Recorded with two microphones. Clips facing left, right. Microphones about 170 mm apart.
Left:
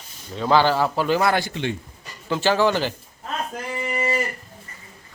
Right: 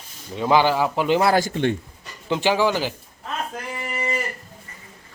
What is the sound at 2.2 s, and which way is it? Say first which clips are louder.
Speech: even; 15° right (ahead or behind).